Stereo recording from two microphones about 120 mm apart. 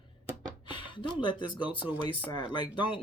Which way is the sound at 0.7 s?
45° left (ahead or behind).